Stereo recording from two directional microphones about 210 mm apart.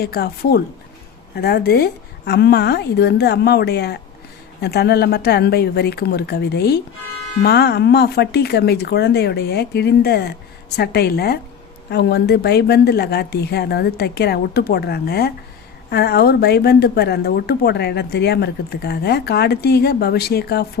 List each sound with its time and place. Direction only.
0.0 s a woman's voice: 45° left (ahead or behind)